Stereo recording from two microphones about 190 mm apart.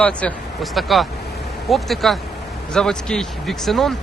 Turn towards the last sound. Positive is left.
turn(degrees=0)  # may be behind; listen again after turning